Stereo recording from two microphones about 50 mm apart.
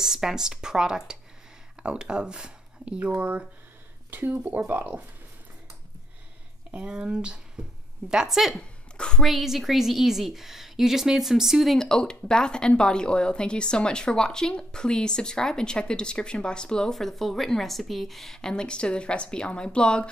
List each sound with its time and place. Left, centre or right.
0.0 s speech: centre; by 5.0 s right
6.7 s speech: centre
8.1 s a woman's voice: centre
8.5 s a sound: centre
9.2 s a woman's voice: centre; by 20.1 s left